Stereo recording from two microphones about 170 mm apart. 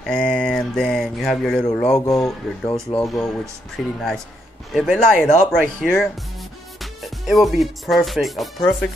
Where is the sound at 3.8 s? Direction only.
Centre (ahead or behind).